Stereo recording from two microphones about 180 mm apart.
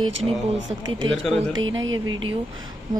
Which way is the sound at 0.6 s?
90° right.